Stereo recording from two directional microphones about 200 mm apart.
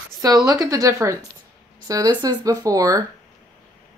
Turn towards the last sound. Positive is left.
turn(degrees=-15)  # may be behind; listen again after turning